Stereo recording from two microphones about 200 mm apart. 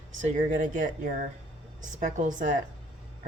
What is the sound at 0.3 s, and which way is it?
A woman's voice, 40° right (ahead or behind).